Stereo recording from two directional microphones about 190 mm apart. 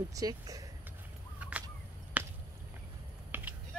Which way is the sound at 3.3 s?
10° right (ahead or behind).